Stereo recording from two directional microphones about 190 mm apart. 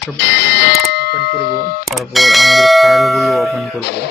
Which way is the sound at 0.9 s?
60° left (ahead or behind).